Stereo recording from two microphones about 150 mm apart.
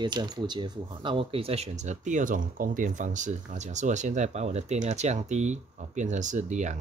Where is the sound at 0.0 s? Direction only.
30° right (ahead or behind).